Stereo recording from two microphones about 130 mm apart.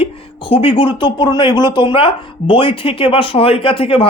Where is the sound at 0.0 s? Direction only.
45° left (ahead or behind).